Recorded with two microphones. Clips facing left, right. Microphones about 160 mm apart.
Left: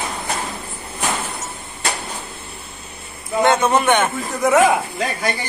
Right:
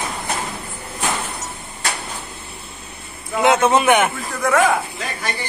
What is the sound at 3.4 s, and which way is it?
Speech, 10° right (ahead or behind).